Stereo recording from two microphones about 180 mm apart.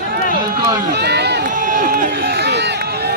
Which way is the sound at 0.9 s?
70° right (ahead or behind).